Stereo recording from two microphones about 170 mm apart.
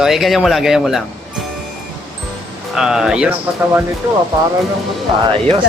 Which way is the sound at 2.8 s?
5° right (ahead or behind).